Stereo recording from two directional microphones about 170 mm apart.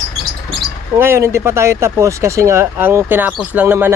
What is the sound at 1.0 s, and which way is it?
Speech, 15° right (ahead or behind).